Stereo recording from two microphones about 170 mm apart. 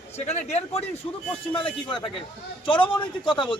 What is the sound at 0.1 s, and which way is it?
A man's voice, 40° left (ahead or behind).